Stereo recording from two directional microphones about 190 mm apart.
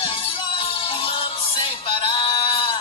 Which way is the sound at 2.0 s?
25° left (ahead or behind).